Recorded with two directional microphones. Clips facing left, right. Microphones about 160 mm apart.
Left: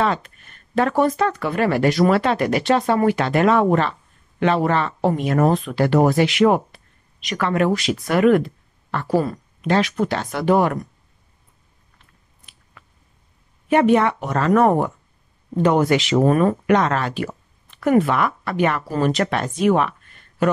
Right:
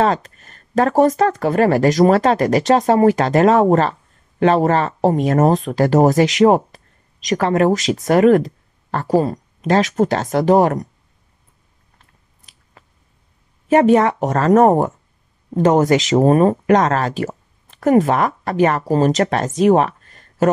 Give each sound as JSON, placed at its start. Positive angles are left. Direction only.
{"t": 0.0, "sound": "speech", "side_deg": -40}
{"t": 13.7, "sound": "speech", "side_deg": -40}